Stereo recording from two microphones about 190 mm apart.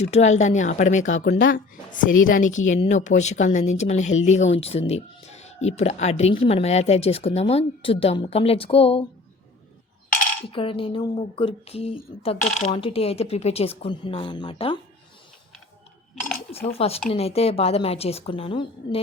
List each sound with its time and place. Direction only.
0.0 s speech: 35° left (ahead or behind)
1.2 s a woman's voice: 55° left (ahead or behind); by 9.0 s 30° left (ahead or behind)
10.5 s a woman's voice: 30° left (ahead or behind)
16.5 s speech: 30° left (ahead or behind)